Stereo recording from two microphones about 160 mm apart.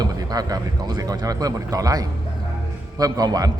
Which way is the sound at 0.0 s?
25° right (ahead or behind).